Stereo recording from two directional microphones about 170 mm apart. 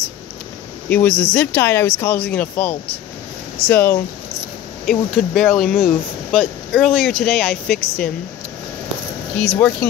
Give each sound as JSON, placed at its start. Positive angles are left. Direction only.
{"t": 0.8, "sound": "speech", "side_deg": 10}
{"t": 9.4, "sound": "speech", "side_deg": 10}